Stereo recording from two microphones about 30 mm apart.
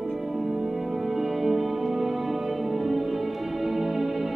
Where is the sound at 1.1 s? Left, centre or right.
Centre.